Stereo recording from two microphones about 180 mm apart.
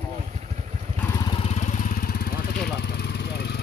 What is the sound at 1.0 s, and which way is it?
Lawn mower, 20° left (ahead or behind).